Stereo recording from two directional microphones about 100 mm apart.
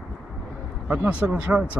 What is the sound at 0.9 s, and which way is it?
Speech, 20° right (ahead or behind).